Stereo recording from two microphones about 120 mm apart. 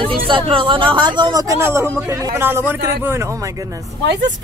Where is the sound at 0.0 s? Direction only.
45° right (ahead or behind).